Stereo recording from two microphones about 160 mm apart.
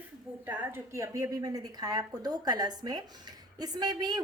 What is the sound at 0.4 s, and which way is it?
A woman's voice, 15° right (ahead or behind).